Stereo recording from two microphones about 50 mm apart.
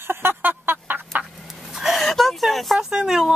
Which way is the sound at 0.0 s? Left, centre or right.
Right.